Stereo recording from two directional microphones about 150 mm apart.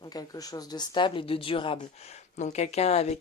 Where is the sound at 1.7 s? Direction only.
50° left (ahead or behind).